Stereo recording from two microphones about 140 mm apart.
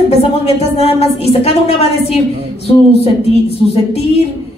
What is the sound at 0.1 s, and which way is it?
A woman's voice, 45° left (ahead or behind).